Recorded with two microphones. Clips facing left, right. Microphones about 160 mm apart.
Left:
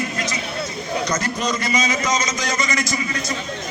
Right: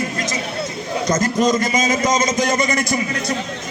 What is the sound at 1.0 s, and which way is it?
A man's voice, 45° right (ahead or behind).